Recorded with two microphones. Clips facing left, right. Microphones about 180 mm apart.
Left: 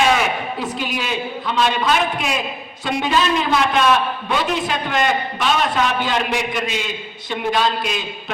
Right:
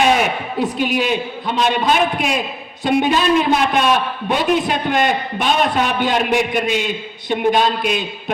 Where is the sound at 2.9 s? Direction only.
55° right (ahead or behind).